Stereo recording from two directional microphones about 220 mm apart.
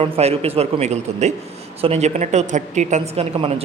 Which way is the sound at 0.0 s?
30° right (ahead or behind).